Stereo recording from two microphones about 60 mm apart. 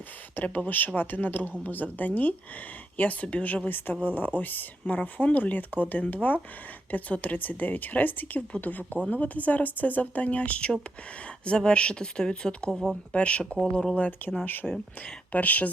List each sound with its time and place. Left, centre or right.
0.3 s a woman's voice: left; by 14.1 s centre
14.4 s a woman's voice: left